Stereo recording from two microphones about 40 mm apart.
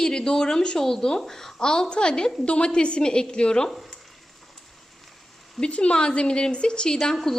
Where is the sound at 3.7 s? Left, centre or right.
Centre.